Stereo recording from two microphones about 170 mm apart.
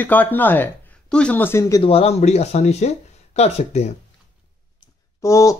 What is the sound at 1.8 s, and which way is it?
Speech, 35° left (ahead or behind).